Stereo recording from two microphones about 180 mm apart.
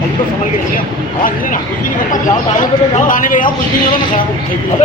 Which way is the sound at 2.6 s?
45° left (ahead or behind).